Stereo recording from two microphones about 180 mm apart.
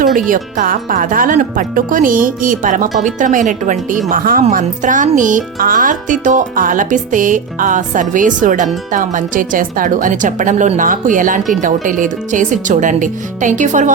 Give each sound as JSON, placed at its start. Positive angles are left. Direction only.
{"t": 0.3, "sound": "speech", "side_deg": -50}